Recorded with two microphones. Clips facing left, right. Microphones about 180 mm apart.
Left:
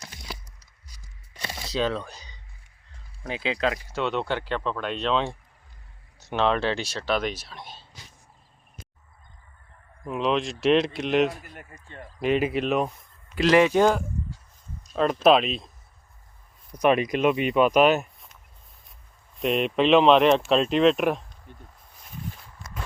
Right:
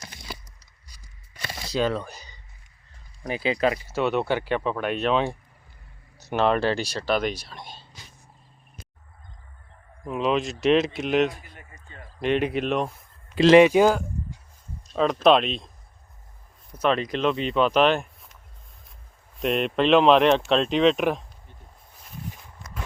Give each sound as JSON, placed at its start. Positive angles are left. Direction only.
{"t": 1.4, "sound": "a sound", "side_deg": 0}
{"t": 3.2, "sound": "speech", "side_deg": -5}
{"t": 10.1, "sound": "speech", "side_deg": 0}
{"t": 11.4, "sound": "a sound", "side_deg": 50}
{"t": 12.2, "sound": "speech", "side_deg": 5}
{"t": 13.3, "sound": "speech", "side_deg": -25}
{"t": 16.8, "sound": "speech", "side_deg": 15}
{"t": 19.4, "sound": "speech", "side_deg": 0}